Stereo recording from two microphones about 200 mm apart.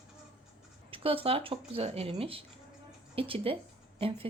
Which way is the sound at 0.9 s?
25° right (ahead or behind).